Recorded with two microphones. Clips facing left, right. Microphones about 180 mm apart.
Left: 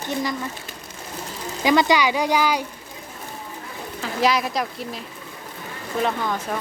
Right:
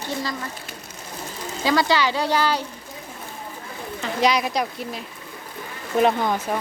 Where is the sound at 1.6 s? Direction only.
15° left (ahead or behind).